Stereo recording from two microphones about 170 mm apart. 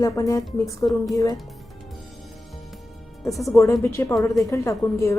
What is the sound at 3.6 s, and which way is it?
Speech, 15° left (ahead or behind).